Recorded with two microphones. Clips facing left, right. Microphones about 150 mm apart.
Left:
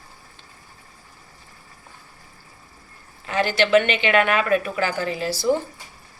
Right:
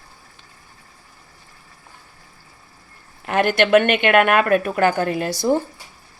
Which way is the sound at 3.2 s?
55° right (ahead or behind).